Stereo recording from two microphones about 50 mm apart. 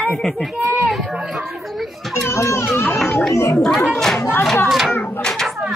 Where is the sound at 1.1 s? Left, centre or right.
Centre.